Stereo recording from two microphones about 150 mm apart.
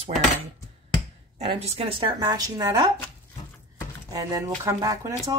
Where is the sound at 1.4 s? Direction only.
40° right (ahead or behind).